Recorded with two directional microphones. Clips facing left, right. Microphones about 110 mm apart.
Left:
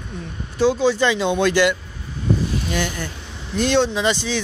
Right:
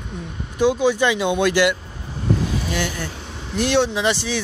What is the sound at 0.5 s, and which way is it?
Speech, 15° right (ahead or behind).